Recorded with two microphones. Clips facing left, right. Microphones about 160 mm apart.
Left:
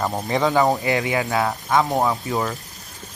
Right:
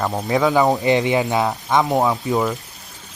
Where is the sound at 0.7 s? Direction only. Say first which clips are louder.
Right 4 dB; 20° right (ahead or behind).